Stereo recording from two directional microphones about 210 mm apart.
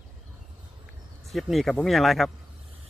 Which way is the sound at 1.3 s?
Centre (ahead or behind).